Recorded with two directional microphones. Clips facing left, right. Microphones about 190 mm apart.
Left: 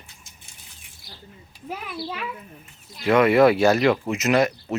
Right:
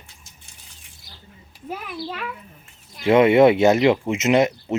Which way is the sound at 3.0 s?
25° right (ahead or behind).